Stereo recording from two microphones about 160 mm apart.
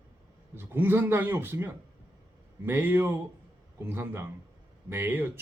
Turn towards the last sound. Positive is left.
turn(degrees=-15)  # may be behind; listen again after turning